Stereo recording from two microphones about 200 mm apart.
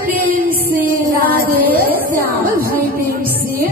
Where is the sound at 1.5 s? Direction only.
45° right (ahead or behind).